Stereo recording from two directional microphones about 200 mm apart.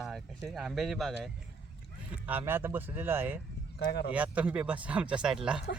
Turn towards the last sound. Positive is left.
turn(degrees=-5)  # may be behind; listen again after turning